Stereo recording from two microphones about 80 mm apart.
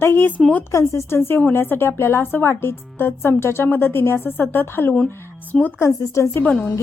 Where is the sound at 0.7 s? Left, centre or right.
Left; by 5.7 s centre.